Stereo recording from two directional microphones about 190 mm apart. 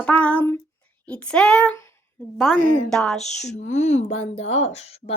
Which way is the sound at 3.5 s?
35° left (ahead or behind).